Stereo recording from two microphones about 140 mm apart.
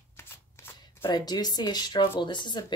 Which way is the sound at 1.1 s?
30° left (ahead or behind).